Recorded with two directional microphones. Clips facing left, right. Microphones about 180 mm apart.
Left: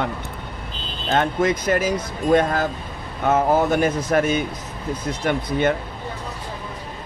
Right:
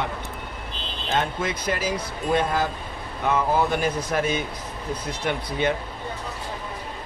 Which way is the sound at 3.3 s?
45° left (ahead or behind).